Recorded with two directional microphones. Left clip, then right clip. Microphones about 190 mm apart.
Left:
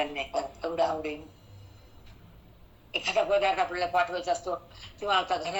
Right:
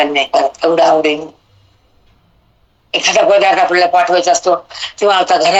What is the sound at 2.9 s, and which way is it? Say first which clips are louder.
Speech: right 16 dB; 55° right (ahead or behind).